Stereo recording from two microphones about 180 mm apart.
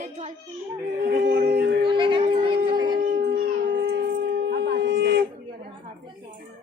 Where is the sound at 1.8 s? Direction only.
25° right (ahead or behind).